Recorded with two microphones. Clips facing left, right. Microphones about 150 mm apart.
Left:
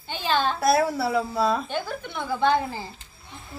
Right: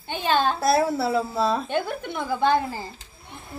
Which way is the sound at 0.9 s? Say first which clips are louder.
Right 1 dB; centre (ahead or behind).